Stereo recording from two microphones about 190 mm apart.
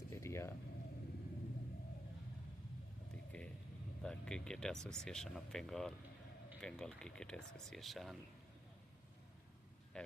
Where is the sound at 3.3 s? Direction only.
5° left (ahead or behind).